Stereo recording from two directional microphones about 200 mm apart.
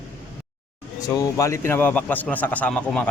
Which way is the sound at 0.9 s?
15° left (ahead or behind).